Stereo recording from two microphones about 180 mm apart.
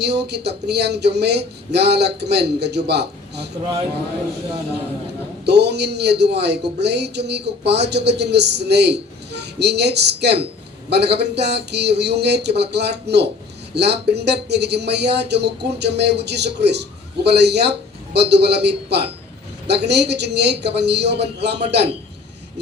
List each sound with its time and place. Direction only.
0.0 s speech: 65° right (ahead or behind)
5.5 s speech: 70° right (ahead or behind)